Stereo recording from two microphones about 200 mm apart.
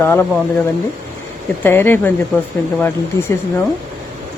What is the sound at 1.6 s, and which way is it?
Speech, 10° left (ahead or behind).